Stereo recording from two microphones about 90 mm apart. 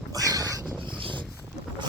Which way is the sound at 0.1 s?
45° right (ahead or behind).